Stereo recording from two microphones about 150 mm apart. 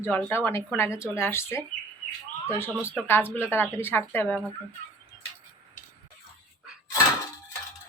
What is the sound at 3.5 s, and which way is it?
Speech, 15° left (ahead or behind).